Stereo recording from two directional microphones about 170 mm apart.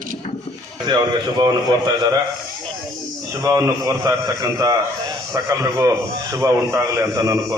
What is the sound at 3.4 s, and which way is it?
A man's voice, 20° right (ahead or behind).